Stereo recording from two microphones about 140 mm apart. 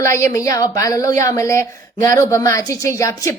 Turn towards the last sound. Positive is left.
turn(degrees=20)  # may be behind; listen again after turning